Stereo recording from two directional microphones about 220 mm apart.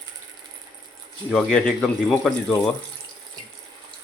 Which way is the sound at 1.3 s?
5° left (ahead or behind).